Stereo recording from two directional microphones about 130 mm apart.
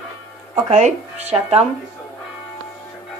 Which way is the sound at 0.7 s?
60° right (ahead or behind).